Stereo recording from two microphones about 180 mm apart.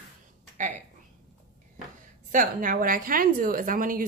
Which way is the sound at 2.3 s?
45° right (ahead or behind).